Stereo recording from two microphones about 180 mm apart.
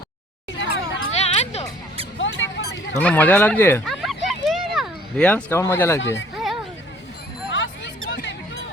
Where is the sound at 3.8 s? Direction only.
Centre (ahead or behind).